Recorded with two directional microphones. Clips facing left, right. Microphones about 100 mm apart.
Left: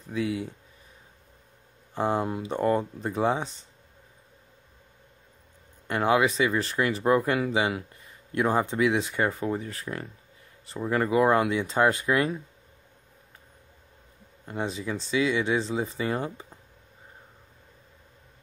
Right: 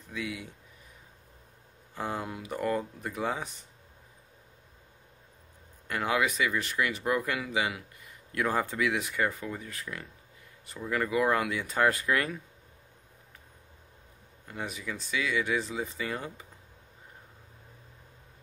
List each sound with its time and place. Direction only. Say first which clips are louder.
0.1 s speech: left 8 dB; 30° left (ahead or behind)
2.0 s speech: left 8 dB; 30° left (ahead or behind)
5.9 s speech: left 6 dB; 30° left (ahead or behind)
14.5 s speech: left 6 dB; 30° left (ahead or behind)